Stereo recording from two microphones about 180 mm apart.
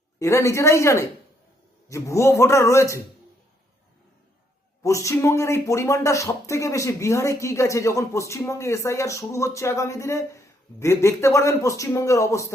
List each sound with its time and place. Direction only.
0.2 s speech: 15° left (ahead or behind)
4.8 s speech: 15° left (ahead or behind)